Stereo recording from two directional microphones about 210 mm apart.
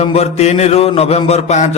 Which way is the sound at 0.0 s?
30° left (ahead or behind).